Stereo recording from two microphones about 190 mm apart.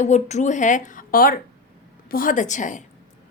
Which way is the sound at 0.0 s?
35° left (ahead or behind).